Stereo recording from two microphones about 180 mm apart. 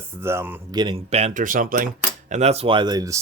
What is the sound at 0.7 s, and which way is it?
Speech, 25° right (ahead or behind).